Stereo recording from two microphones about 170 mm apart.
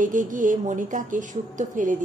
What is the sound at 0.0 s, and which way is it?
A woman's voice, 50° right (ahead or behind).